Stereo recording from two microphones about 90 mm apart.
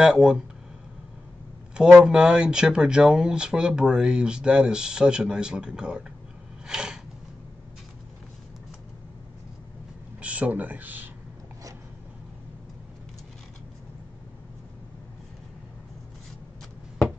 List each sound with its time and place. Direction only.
0.0 s speech: 5° right (ahead or behind)
1.8 s speech: 10° right (ahead or behind)
6.7 s a sound: 5° right (ahead or behind)
10.2 s speech: 15° right (ahead or behind)